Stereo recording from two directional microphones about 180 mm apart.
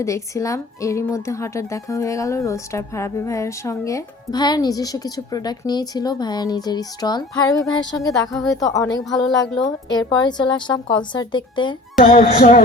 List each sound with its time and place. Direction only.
0.0 s speech: 15° left (ahead or behind)
11.9 s music: 45° left (ahead or behind)